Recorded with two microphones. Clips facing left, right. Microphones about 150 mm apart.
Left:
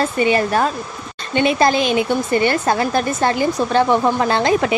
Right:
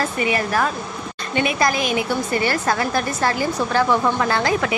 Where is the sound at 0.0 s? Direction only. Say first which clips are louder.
Left 5 dB; 25° left (ahead or behind).